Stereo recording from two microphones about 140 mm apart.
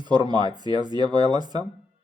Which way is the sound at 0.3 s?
30° right (ahead or behind).